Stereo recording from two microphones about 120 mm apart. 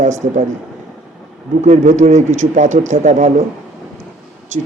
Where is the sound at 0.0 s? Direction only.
85° right.